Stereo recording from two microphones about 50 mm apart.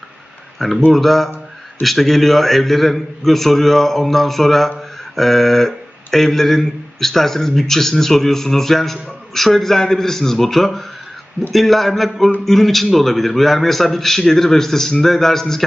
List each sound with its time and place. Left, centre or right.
0.9 s speech: centre